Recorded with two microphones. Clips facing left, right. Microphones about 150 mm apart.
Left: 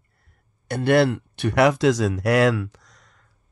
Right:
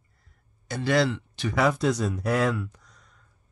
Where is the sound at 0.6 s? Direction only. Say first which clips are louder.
Left 6 dB; 60° left (ahead or behind); by 3.2 s 90° left.